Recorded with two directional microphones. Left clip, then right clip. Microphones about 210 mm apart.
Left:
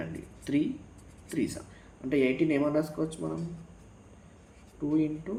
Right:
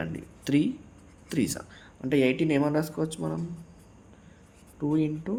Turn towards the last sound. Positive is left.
turn(degrees=-55)  # may be behind; listen again after turning